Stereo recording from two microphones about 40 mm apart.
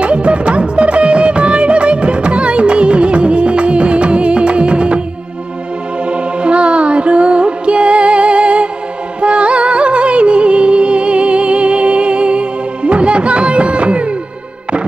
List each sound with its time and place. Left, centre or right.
0.0 s music: right
6.0 s music: right